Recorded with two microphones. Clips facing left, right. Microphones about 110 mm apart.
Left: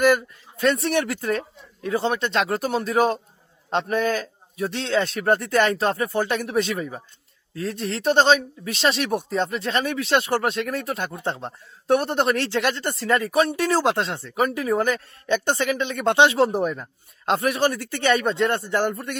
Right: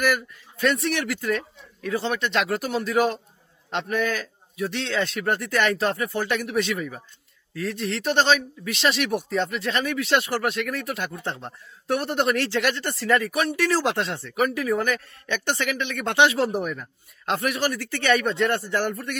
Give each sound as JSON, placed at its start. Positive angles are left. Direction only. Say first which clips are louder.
{"t": 0.0, "sound": "speech", "louder": "left 5 dB", "side_deg": 25}